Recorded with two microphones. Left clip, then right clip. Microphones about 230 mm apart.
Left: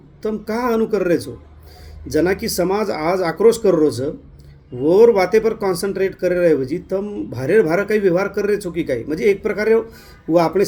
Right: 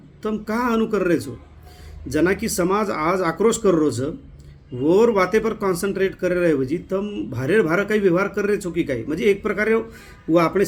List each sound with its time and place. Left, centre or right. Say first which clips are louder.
0.2 s speech: left 2 dB; centre